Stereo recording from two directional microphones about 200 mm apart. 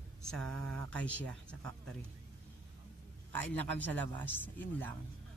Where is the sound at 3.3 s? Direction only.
10° left (ahead or behind).